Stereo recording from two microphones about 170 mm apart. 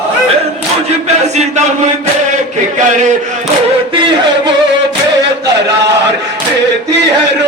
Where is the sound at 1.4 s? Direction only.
40° right (ahead or behind).